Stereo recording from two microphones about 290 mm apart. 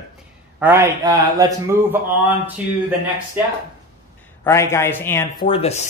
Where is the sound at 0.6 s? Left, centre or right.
Centre.